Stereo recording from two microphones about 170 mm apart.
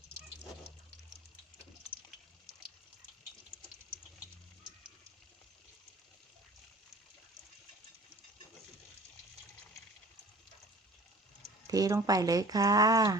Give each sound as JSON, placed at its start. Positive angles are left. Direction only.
{"t": 11.7, "sound": "speech", "side_deg": -20}